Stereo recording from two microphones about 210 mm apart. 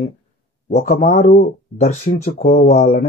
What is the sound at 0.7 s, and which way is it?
Speech, 45° left (ahead or behind).